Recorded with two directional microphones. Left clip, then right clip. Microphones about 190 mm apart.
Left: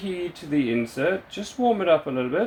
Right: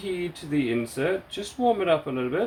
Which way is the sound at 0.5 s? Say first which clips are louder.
Left 2 dB; 20° left (ahead or behind).